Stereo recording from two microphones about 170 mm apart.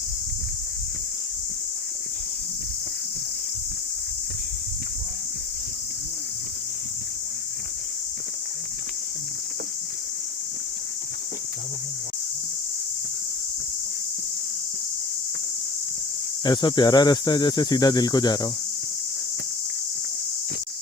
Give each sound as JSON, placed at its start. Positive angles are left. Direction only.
{"t": 16.4, "sound": "speech", "side_deg": 25}